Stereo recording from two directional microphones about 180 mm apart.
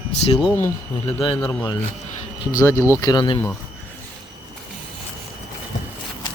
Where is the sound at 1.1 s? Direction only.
30° left (ahead or behind).